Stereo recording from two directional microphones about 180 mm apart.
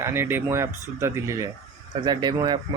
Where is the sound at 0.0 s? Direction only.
15° right (ahead or behind).